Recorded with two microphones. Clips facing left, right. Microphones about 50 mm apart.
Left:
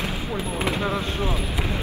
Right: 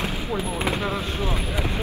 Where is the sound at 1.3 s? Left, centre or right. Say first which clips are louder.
Even; right.